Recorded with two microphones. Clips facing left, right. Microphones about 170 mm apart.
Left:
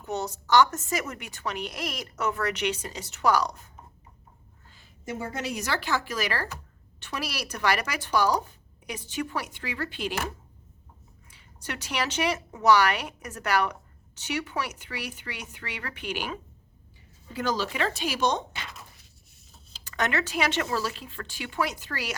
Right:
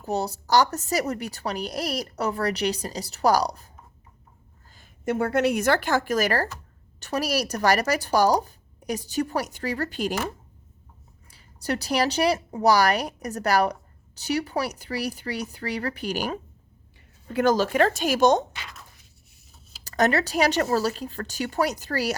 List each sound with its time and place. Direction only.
0.0 s a woman's voice: 35° right (ahead or behind)
4.7 s a woman's voice: 55° right (ahead or behind)
11.3 s a woman's voice: 35° right (ahead or behind)
17.2 s speech: 55° right (ahead or behind)
19.8 s a woman's voice: 40° right (ahead or behind)